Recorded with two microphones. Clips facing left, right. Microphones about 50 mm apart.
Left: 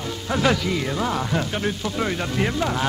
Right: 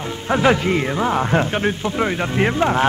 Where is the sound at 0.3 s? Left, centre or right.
Right.